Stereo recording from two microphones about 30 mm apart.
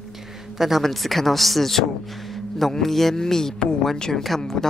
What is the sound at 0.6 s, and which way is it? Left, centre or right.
Speech, centre.